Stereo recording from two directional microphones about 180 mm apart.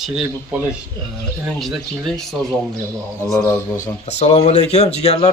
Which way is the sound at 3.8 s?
40° left (ahead or behind).